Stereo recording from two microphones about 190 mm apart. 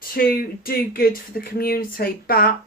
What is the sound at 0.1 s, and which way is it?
Speech, 50° left (ahead or behind).